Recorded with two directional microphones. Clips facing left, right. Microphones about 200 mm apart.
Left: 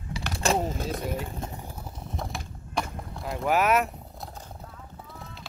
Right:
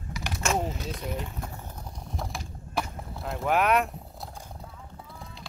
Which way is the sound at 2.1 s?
Centre (ahead or behind).